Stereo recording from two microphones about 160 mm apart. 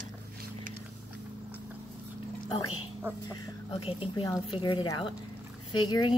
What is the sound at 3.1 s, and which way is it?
Speech, 15° right (ahead or behind).